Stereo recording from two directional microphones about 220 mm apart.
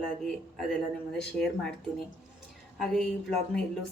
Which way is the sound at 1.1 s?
5° left (ahead or behind).